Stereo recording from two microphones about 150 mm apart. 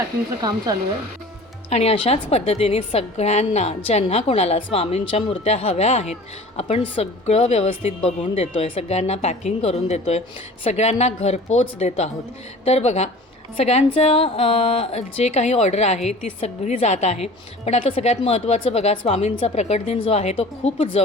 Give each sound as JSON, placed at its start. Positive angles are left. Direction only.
{"t": 0.4, "sound": "speech", "side_deg": -25}
{"t": 1.7, "sound": "a woman's voice", "side_deg": 45}